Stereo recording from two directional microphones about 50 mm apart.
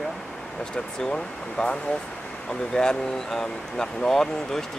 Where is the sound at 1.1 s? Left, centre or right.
Left.